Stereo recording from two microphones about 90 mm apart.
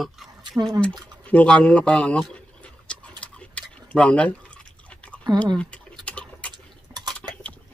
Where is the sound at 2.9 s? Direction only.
15° left (ahead or behind).